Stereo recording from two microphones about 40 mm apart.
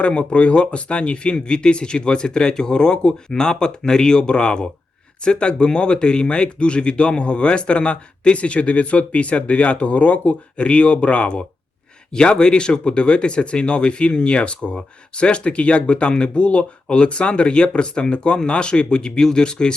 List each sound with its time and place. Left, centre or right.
0.0 s speech: left